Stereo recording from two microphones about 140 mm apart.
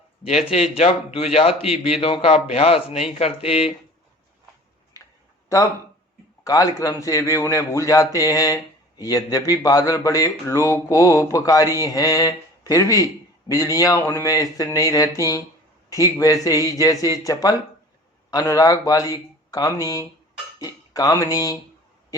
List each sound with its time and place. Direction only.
0.5 s speech: 45° left (ahead or behind)
6.4 s speech: 25° left (ahead or behind)